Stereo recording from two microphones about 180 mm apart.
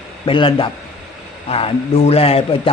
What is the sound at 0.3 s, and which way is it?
A man's voice, 30° left (ahead or behind).